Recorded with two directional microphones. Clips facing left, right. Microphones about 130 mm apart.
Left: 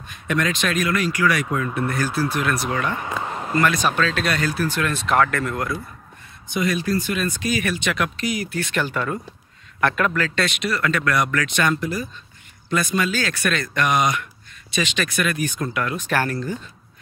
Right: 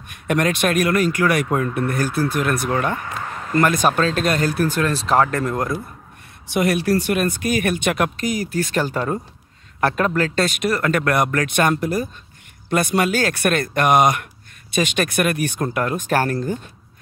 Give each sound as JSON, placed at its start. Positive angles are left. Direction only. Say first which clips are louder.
{"t": 0.1, "sound": "speech", "louder": "right 3 dB", "side_deg": -55}
{"t": 3.0, "sound": "a sound", "louder": "left 2 dB", "side_deg": 20}
{"t": 3.5, "sound": "speech", "louder": "right 3 dB", "side_deg": -50}
{"t": 6.4, "sound": "speech", "louder": "right 4 dB", "side_deg": -65}